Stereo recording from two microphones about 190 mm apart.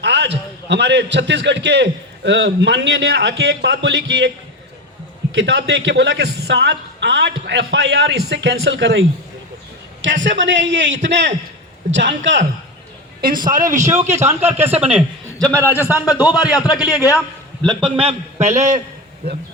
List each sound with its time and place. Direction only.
0.0 s a sound: 65° right (ahead or behind)
0.7 s a man's voice: 65° right (ahead or behind)
5.3 s a man's voice: 65° right (ahead or behind)
13.6 s speech: 15° right (ahead or behind)
15.4 s a man's voice: 5° left (ahead or behind)
17.6 s a man's voice: centre (ahead or behind)
17.9 s a man's voice: 30° right (ahead or behind)